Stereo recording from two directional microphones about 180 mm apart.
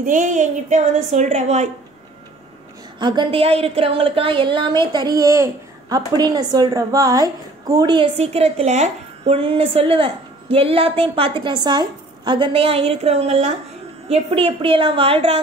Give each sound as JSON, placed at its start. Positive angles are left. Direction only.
{"t": 0.0, "sound": "a woman's voice", "side_deg": -45}
{"t": 3.0, "sound": "speech", "side_deg": -25}